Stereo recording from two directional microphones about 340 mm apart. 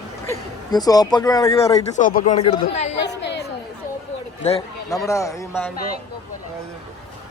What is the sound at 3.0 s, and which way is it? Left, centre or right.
Chatter, left.